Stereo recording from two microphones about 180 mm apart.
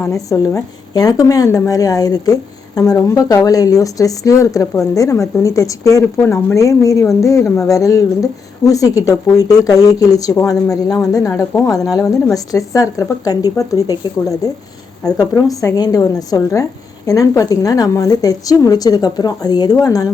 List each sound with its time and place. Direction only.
0.0 s a woman's voice: 15° left (ahead or behind)